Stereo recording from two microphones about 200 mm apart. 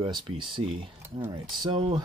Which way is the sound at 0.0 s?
25° right (ahead or behind).